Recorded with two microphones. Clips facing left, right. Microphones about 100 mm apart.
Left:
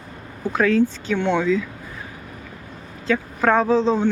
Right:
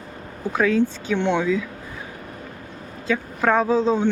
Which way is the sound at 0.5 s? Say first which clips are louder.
Left 1 dB; 10° right (ahead or behind).